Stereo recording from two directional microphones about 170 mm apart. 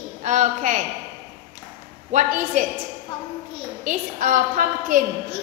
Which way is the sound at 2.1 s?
50° right (ahead or behind).